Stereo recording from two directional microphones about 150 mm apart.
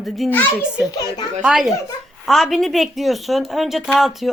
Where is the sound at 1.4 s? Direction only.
Centre (ahead or behind).